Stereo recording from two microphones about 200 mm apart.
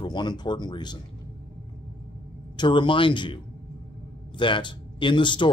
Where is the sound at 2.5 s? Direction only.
25° left (ahead or behind).